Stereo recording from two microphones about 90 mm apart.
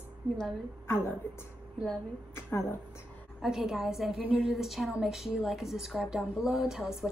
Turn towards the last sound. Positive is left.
turn(degrees=-5)  # may be behind; listen again after turning